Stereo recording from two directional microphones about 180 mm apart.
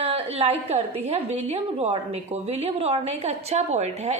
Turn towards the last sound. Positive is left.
turn(degrees=-40)  # may be behind; listen again after turning